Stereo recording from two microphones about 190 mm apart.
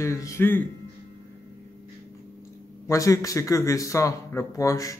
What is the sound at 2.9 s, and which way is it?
Speech, 15° left (ahead or behind).